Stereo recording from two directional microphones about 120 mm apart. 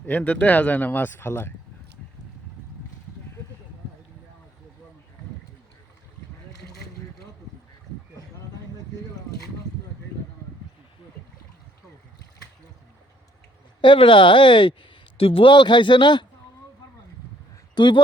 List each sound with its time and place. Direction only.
0.0 s speech: 10° left (ahead or behind)
13.8 s speech: 45° left (ahead or behind)
17.7 s speech: 40° left (ahead or behind)